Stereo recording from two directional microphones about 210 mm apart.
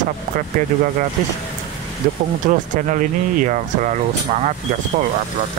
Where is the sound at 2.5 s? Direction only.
35° right (ahead or behind).